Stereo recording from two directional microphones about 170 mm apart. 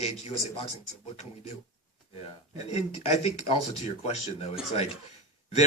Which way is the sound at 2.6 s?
40° left (ahead or behind).